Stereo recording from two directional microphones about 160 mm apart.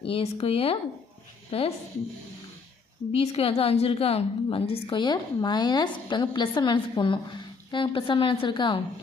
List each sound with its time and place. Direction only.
0.0 s a woman's voice: 35° left (ahead or behind)
3.1 s a woman's voice: 35° left (ahead or behind)